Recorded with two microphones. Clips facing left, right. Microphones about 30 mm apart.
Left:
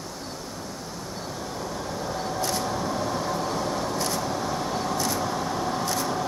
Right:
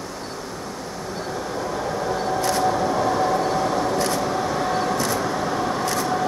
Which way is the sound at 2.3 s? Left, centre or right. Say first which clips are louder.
Right 8 dB; right.